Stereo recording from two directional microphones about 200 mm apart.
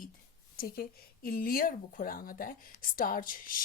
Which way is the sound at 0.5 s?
45° left (ahead or behind).